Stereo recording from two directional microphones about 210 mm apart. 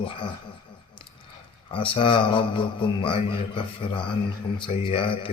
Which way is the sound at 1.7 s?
25° left (ahead or behind).